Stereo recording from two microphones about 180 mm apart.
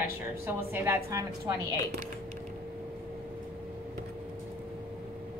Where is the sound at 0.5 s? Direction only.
15° right (ahead or behind).